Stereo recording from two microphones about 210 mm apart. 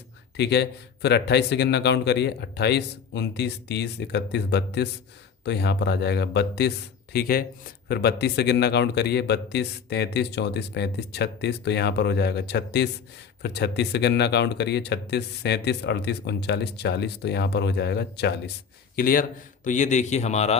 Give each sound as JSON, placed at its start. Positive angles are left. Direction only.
{"t": 0.3, "sound": "a man's voice", "side_deg": 55}